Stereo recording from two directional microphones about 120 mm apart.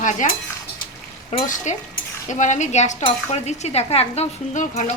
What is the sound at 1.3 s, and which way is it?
A woman's voice, 85° left.